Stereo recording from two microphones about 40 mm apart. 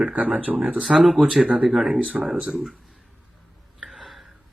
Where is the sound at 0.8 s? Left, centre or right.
Centre.